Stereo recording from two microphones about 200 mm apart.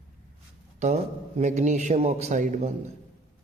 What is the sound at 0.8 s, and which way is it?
Speech, 35° right (ahead or behind).